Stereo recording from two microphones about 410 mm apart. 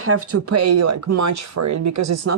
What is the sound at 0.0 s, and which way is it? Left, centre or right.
Speech, right.